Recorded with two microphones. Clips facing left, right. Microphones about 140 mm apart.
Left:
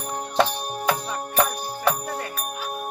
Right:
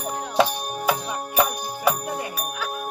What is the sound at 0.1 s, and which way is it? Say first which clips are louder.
Music: right 1 dB; 5° right (ahead or behind).